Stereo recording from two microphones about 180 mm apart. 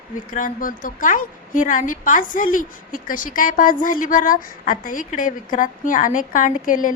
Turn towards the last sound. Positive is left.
turn(degrees=50)  # may be behind; listen again after turning